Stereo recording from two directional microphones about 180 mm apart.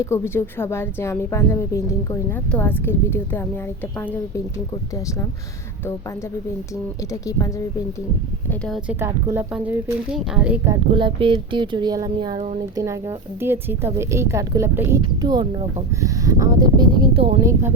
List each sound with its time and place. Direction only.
0.0 s a woman's voice: 15° left (ahead or behind)
7.1 s a woman's voice: 20° left (ahead or behind)
8.4 s speech: 5° left (ahead or behind)
8.9 s speech: 15° right (ahead or behind)
10.9 s speech: 25° right (ahead or behind)
17.4 s speech: 15° right (ahead or behind)